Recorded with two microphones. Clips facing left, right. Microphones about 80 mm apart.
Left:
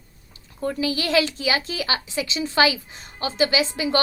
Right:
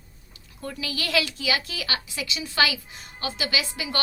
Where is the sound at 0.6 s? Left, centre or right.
Left.